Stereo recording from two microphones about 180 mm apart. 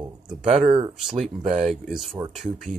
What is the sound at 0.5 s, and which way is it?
Speech, 30° right (ahead or behind).